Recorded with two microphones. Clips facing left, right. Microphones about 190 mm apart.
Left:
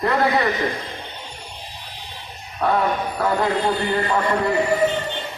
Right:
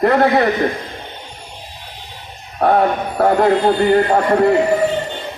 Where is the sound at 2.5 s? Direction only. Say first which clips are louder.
Right 6 dB; 50° right (ahead or behind).